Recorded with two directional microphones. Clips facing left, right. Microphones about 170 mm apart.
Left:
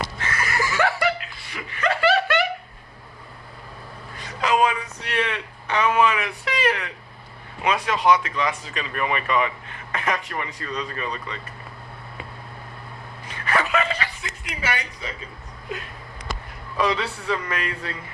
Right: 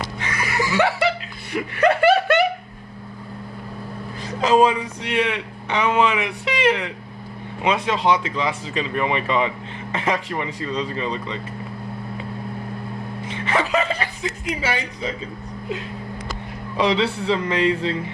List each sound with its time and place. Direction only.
0.2 s laughter: 15° right (ahead or behind)
1.5 s snicker: 55° right (ahead or behind)
4.4 s a sound: 30° right (ahead or behind)
5.1 s speech: 15° right (ahead or behind)
13.2 s chuckle: 20° right (ahead or behind)
16.7 s speech: 20° right (ahead or behind)